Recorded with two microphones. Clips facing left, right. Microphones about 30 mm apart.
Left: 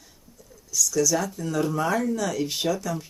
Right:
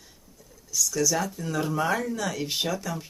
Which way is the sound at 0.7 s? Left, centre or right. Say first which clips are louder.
Left 3 dB; centre.